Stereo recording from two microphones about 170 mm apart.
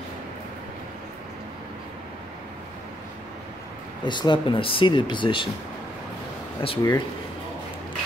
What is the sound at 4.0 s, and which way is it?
Speech, 25° left (ahead or behind).